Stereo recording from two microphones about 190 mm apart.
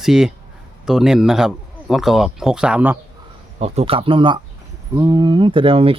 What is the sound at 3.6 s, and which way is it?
Speech, 30° right (ahead or behind).